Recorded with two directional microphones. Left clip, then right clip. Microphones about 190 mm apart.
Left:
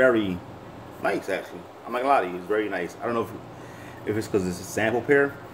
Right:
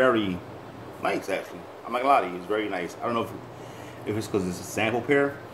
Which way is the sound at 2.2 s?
15° right (ahead or behind).